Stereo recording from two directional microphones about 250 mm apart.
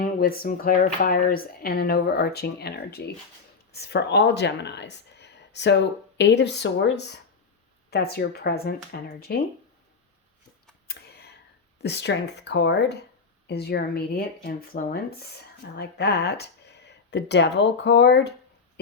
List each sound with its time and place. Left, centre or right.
0.0 s speech: left
10.8 s a sound: left
11.8 s speech: left